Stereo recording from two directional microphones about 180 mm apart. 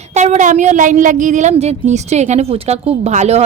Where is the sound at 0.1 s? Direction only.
40° right (ahead or behind).